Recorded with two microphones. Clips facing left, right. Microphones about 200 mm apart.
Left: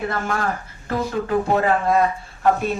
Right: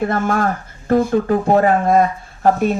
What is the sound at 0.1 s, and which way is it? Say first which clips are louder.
Speech: right 6 dB; 50° right (ahead or behind).